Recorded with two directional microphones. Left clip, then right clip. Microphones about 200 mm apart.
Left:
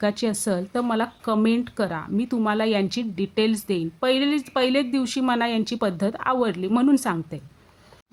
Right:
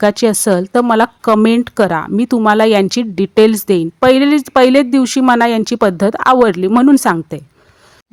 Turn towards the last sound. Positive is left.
turn(degrees=-45)  # may be behind; listen again after turning